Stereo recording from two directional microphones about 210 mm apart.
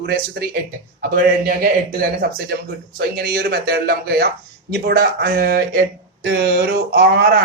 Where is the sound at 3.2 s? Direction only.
50° right (ahead or behind).